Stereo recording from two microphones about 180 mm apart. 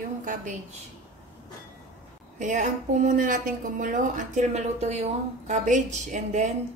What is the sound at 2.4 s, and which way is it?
A woman's voice, 45° right (ahead or behind).